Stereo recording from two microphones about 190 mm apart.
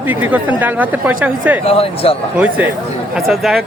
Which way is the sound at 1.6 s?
30° left (ahead or behind).